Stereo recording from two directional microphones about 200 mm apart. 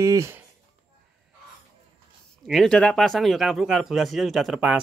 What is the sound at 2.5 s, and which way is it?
Speech, 5° left (ahead or behind).